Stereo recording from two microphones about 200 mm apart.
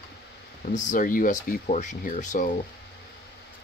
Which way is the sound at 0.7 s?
40° left (ahead or behind).